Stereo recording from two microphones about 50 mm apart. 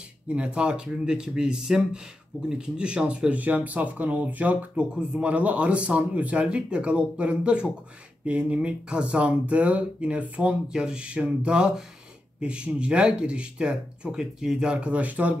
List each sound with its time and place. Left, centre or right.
0.3 s speech: right
3.3 s speech: right
10.7 s speech: centre